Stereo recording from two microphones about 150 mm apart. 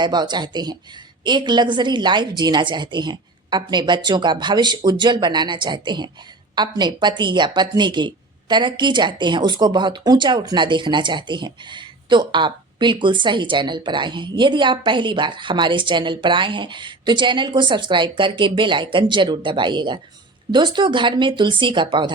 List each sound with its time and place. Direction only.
0.0 s speech: 30° right (ahead or behind)